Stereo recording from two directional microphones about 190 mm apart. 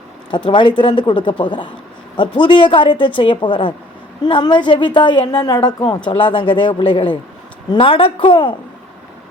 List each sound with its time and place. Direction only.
0.3 s a woman's voice: 25° left (ahead or behind)